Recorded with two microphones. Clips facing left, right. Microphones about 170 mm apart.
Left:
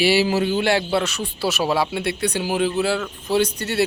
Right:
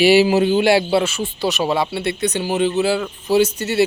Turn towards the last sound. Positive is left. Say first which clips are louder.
# right 4 dB
turn(degrees=0)  # may be behind; listen again after turning